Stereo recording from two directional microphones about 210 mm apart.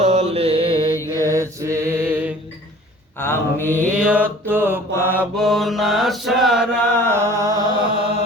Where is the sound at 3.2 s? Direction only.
10° left (ahead or behind).